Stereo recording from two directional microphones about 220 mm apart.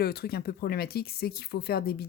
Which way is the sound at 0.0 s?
45° left (ahead or behind).